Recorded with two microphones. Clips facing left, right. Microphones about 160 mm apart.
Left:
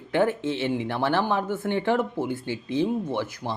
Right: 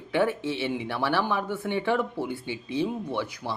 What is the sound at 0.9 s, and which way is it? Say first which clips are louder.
Speech: left 2 dB; 20° left (ahead or behind).